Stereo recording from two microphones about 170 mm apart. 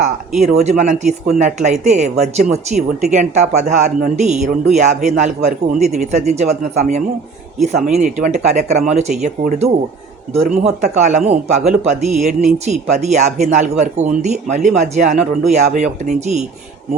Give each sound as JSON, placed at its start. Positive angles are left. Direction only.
{"t": 0.0, "sound": "speech", "side_deg": -40}